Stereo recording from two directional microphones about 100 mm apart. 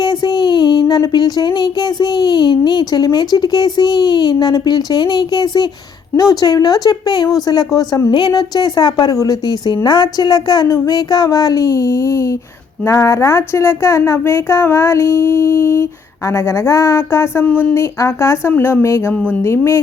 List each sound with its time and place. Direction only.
0.0 s a sound: 45° left (ahead or behind)
6.1 s a woman's voice: 40° left (ahead or behind)
8.3 s a sound: 45° left (ahead or behind)
10.7 s a woman's voice: 40° left (ahead or behind)
17.4 s speech: 15° left (ahead or behind)
17.7 s speech: 30° left (ahead or behind)
19.1 s speech: 15° left (ahead or behind)
19.4 s speech: 25° left (ahead or behind)